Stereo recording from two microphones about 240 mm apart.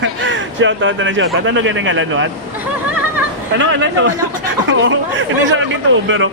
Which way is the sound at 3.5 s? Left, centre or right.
Right.